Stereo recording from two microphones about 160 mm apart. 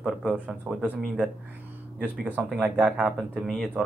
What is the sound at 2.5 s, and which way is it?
Speech, centre (ahead or behind).